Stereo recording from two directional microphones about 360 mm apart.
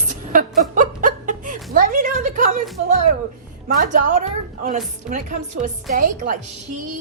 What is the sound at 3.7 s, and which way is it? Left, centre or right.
A woman's voice, right.